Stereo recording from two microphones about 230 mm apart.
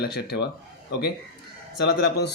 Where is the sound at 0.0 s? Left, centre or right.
Left.